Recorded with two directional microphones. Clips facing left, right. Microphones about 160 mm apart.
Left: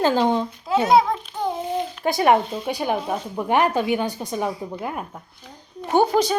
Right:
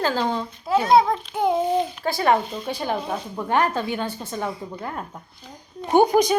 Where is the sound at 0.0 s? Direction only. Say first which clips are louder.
Left 4 dB; 20° left (ahead or behind).